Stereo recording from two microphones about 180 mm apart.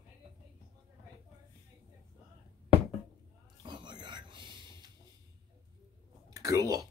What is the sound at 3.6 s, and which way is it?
Whispering, 25° right (ahead or behind).